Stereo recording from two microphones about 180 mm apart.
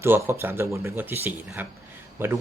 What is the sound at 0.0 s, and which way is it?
Speech, 10° right (ahead or behind).